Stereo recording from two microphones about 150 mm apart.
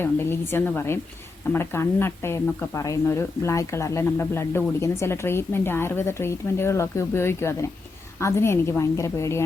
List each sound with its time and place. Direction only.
0.0 s a woman's voice: 15° left (ahead or behind)